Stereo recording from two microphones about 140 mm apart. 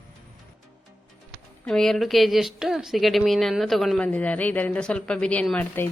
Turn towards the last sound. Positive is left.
turn(degrees=10)  # may be behind; listen again after turning